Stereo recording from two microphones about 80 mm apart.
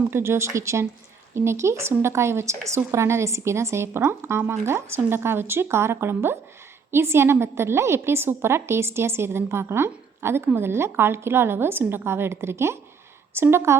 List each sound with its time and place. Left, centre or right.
0.1 s a woman's voice: right